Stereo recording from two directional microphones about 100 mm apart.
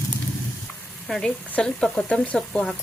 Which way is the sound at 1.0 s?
5° left (ahead or behind).